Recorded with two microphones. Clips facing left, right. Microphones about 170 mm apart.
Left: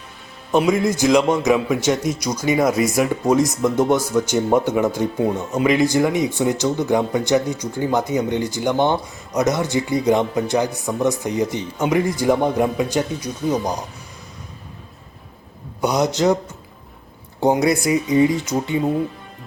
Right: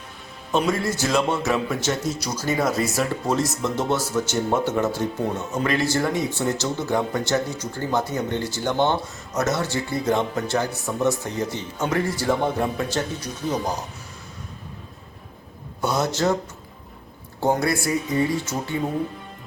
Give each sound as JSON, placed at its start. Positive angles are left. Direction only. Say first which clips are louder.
{"t": 0.5, "sound": "speech", "louder": "left 5 dB", "side_deg": 15}
{"t": 15.8, "sound": "speech", "louder": "left 4 dB", "side_deg": 15}
{"t": 17.4, "sound": "speech", "louder": "left 5 dB", "side_deg": 20}